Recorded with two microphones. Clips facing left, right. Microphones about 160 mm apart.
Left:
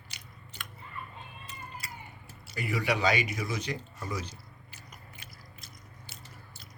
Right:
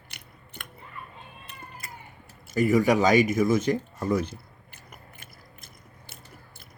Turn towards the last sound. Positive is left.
turn(degrees=-50)  # may be behind; listen again after turning